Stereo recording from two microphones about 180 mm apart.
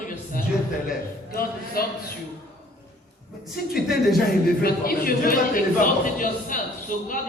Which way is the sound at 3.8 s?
60° left (ahead or behind).